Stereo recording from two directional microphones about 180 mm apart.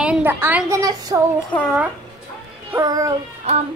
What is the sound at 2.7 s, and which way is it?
Speech, 20° right (ahead or behind).